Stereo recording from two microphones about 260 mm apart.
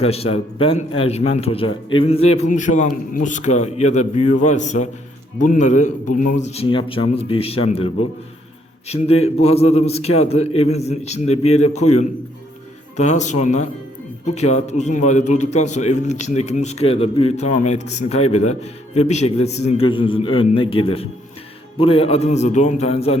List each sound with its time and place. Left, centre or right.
0.0 s a man's voice: left
9.2 s a man's voice: left